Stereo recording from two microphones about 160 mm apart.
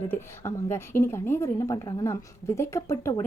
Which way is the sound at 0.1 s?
15° left (ahead or behind).